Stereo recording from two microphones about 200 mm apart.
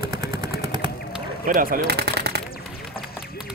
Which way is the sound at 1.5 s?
45° right (ahead or behind).